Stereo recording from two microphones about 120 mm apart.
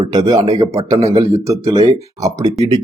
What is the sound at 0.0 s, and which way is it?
Speech, 35° right (ahead or behind).